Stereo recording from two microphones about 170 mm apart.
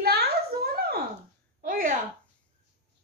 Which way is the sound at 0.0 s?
70° right (ahead or behind).